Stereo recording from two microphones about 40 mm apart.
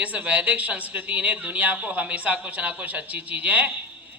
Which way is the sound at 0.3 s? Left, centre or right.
Right.